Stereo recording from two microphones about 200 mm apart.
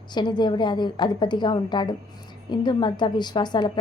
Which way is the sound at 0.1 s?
20° left (ahead or behind).